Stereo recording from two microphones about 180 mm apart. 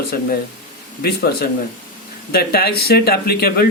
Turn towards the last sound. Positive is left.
turn(degrees=60)  # may be behind; listen again after turning